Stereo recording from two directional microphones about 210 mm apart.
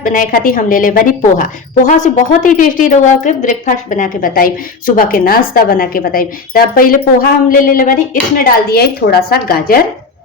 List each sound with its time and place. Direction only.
0.0 s a woman's voice: 40° left (ahead or behind)